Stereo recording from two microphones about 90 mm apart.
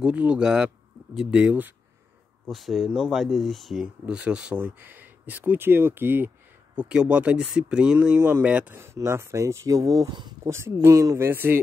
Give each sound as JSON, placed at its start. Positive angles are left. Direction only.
{"t": 0.0, "sound": "speech", "side_deg": -15}
{"t": 2.4, "sound": "speech", "side_deg": 0}
{"t": 3.8, "sound": "speech", "side_deg": -10}
{"t": 8.7, "sound": "speech", "side_deg": -30}
{"t": 10.4, "sound": "speech", "side_deg": -30}